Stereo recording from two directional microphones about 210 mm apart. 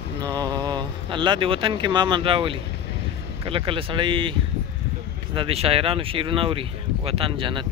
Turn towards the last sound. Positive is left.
turn(degrees=-25)  # may be behind; listen again after turning